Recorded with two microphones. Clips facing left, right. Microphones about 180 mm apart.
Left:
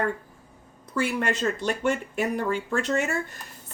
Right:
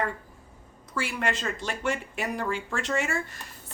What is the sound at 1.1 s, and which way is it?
Speech, 60° left (ahead or behind).